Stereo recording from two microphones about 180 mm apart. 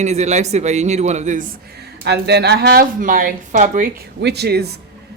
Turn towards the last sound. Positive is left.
turn(degrees=-65)  # may be behind; listen again after turning